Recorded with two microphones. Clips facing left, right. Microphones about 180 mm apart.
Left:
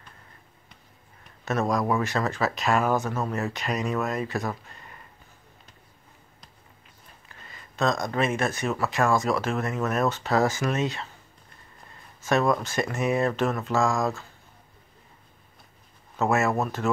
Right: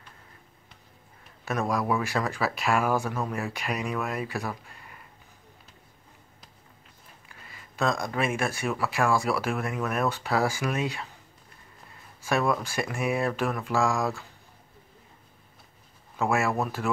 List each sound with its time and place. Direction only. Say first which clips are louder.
1.4 s speech: left 3 dB; 10° right (ahead or behind)
7.2 s speech: left 2 dB; 10° right (ahead or behind)
12.3 s speech: left 3 dB; 10° right (ahead or behind)
16.4 s speech: left 2 dB; 20° left (ahead or behind)